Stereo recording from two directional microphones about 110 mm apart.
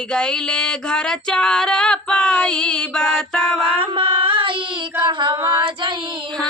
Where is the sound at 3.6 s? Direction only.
55° right (ahead or behind).